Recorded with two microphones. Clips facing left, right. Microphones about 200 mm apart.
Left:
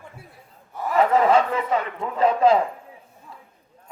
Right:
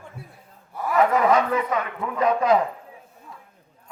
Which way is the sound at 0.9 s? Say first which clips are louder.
Left 1 dB; 30° left (ahead or behind).